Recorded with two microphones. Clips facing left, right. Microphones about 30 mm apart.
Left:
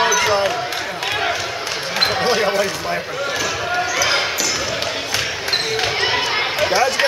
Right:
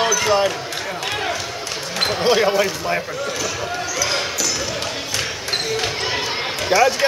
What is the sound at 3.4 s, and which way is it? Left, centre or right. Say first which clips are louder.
Basketball bounce: left 4 dB; centre.